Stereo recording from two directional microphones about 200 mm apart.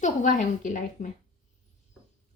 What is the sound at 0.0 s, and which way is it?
Speech, 40° left (ahead or behind).